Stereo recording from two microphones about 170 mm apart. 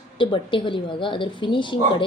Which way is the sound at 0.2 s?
30° left (ahead or behind).